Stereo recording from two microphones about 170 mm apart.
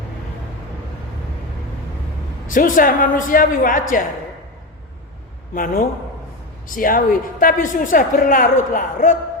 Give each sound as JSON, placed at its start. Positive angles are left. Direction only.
{"t": 2.5, "sound": "a woman's voice", "side_deg": 55}
{"t": 5.5, "sound": "a man's voice", "side_deg": 55}